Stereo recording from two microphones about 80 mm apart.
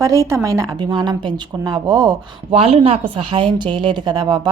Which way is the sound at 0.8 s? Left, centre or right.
Right.